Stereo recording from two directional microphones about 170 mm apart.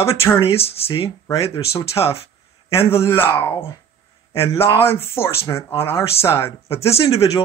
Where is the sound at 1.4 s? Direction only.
35° left (ahead or behind).